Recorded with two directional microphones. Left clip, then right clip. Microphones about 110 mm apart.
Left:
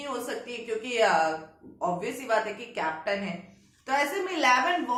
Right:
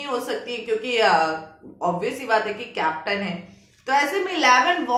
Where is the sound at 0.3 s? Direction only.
20° right (ahead or behind).